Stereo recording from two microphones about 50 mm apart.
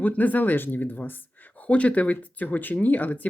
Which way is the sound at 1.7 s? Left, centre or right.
Left.